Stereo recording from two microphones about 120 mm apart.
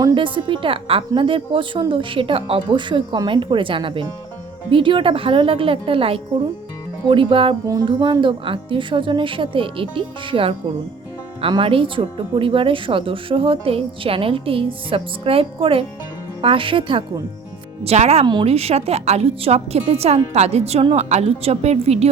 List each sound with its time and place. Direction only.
0.1 s a woman's voice: 45° right (ahead or behind)
7.7 s a woman's voice: 35° right (ahead or behind)
17.8 s a woman's voice: 65° right (ahead or behind)